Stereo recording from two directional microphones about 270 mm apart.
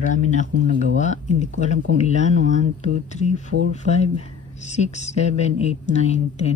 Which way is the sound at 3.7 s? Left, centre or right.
Left.